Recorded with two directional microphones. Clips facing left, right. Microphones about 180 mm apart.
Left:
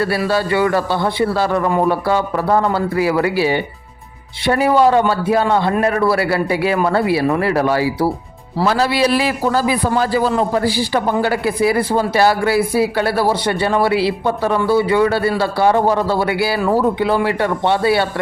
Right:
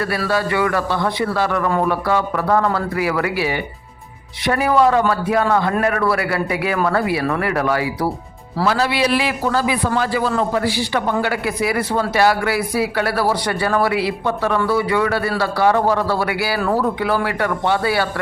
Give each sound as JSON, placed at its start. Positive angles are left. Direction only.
{"t": 0.3, "sound": "a man's voice", "side_deg": 30}